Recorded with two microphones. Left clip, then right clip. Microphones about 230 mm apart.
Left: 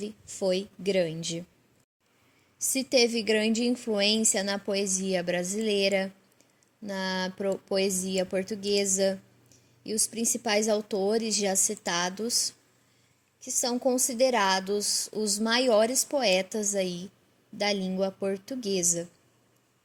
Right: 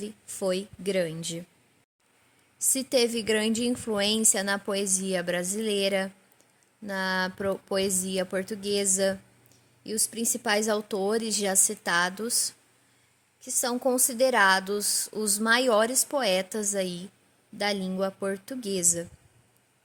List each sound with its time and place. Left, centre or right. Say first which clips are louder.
0.0 s a woman's voice: left 1 dB; centre
2.6 s a woman's voice: left 1 dB; centre